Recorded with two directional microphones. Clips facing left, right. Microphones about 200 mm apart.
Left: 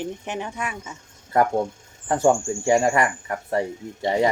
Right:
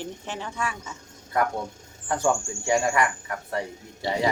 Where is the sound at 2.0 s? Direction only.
30° left (ahead or behind).